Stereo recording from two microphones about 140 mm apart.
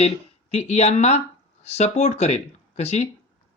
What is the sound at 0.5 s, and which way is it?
Speech, 50° left (ahead or behind).